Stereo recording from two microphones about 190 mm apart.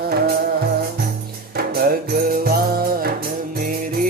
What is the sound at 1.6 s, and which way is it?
Music, 50° right (ahead or behind).